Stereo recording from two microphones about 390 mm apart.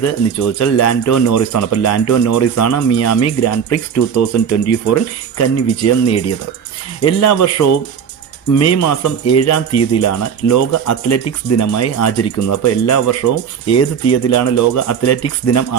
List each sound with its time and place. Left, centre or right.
0.6 s speech: left